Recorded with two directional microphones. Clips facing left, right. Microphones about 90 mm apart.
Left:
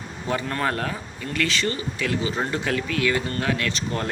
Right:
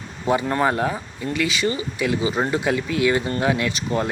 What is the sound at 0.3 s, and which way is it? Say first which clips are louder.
Speech: right 6 dB; 20° right (ahead or behind).